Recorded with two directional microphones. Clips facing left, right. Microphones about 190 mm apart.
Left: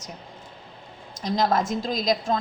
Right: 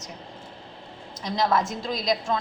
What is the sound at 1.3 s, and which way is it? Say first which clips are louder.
Speech: left 1 dB; 45° left (ahead or behind).